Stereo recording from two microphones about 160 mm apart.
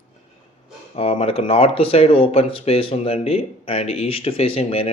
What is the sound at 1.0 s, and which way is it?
Speech, 40° left (ahead or behind).